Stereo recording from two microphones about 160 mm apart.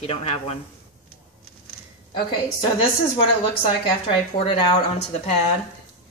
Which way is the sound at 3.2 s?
30° left (ahead or behind).